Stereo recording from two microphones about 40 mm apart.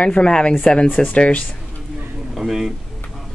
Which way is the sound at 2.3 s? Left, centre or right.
Centre.